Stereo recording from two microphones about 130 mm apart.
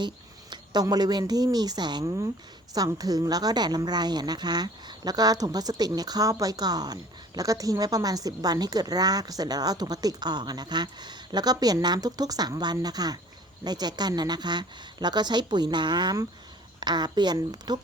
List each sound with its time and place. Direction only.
0.5 s a woman's voice: 30° right (ahead or behind)